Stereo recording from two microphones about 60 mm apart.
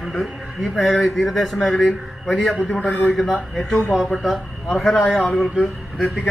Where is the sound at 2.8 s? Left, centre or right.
Left.